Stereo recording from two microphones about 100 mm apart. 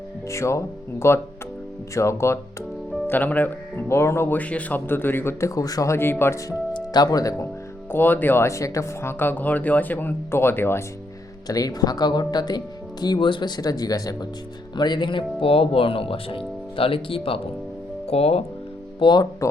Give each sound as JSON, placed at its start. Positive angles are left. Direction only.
{"t": 0.3, "sound": "speech", "side_deg": 30}
{"t": 3.1, "sound": "speech", "side_deg": 15}
{"t": 6.7, "sound": "speech", "side_deg": 40}
{"t": 7.9, "sound": "speech", "side_deg": 20}
{"t": 11.4, "sound": "speech", "side_deg": 40}
{"t": 13.6, "sound": "speech", "side_deg": 40}
{"t": 18.1, "sound": "speech", "side_deg": 90}
{"t": 18.9, "sound": "speech", "side_deg": 50}